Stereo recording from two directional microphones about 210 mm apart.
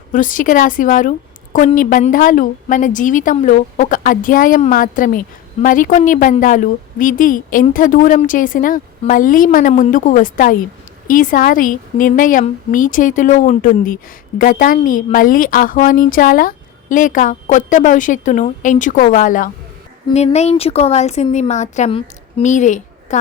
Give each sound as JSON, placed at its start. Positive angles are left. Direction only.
{"t": 0.1, "sound": "a woman's voice", "side_deg": 40}